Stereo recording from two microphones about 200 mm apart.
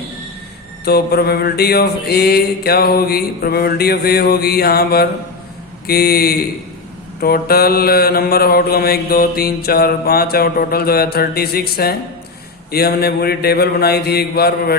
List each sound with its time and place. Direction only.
0.9 s mantra: 50° left (ahead or behind)